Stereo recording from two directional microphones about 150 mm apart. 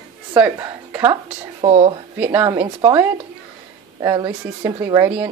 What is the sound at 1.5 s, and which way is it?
Speech, 45° right (ahead or behind).